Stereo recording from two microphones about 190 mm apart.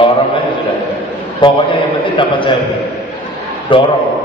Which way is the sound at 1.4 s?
25° left (ahead or behind).